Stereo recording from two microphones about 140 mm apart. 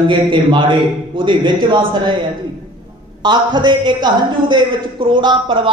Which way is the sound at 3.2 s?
30° right (ahead or behind).